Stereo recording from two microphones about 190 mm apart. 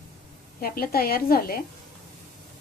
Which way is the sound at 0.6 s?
50° left (ahead or behind).